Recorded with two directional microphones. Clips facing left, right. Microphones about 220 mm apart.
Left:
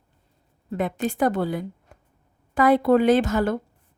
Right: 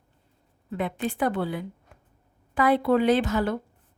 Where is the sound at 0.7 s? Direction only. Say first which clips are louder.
Left 3 dB; 45° left (ahead or behind).